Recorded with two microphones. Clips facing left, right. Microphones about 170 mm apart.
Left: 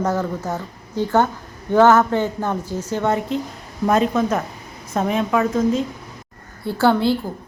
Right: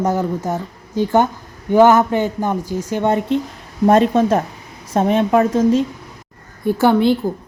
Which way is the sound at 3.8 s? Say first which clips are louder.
Right 5 dB; 30° right (ahead or behind).